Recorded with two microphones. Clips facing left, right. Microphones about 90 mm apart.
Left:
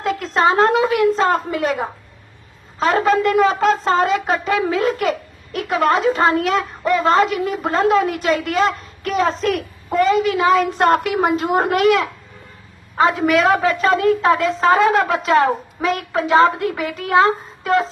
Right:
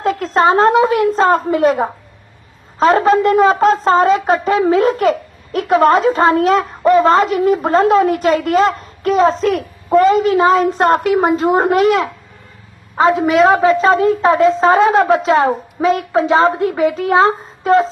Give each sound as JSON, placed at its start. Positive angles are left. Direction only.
{"t": 0.0, "sound": "a woman's voice", "side_deg": -40}